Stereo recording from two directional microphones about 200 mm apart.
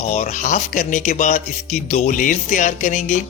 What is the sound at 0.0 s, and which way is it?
Speech, 35° left (ahead or behind).